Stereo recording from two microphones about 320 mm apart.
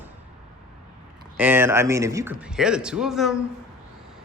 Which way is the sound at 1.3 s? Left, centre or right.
Centre.